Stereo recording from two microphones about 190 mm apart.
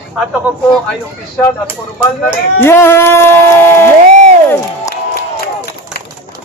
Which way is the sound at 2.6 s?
10° left (ahead or behind).